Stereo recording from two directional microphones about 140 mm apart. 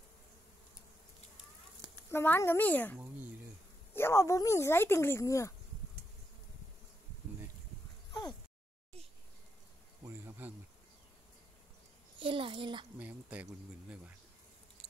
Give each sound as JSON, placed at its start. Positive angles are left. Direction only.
{"t": 2.0, "sound": "speech", "side_deg": 15}
{"t": 8.1, "sound": "a sound", "side_deg": 30}
{"t": 10.0, "sound": "insect", "side_deg": -15}
{"t": 12.2, "sound": "a child's voice", "side_deg": -40}
{"t": 13.0, "sound": "speech", "side_deg": -10}